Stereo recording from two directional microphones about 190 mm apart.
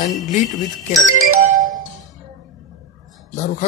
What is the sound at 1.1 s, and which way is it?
Speech, 90° right.